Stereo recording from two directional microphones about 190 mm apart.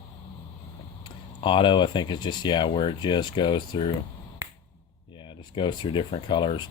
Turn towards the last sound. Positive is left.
turn(degrees=25)  # may be behind; listen again after turning